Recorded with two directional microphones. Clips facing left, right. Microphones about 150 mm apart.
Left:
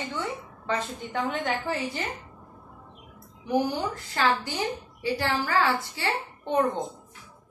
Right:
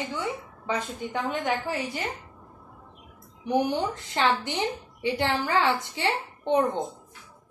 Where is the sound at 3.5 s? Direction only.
20° right (ahead or behind).